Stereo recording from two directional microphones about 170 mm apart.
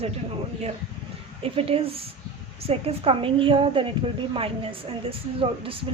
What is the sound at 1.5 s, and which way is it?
A woman's voice, 35° right (ahead or behind).